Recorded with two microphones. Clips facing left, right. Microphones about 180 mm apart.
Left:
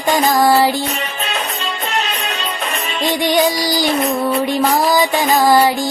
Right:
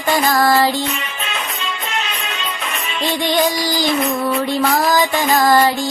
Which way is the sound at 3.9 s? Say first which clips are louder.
Left 1 dB; 40° left (ahead or behind).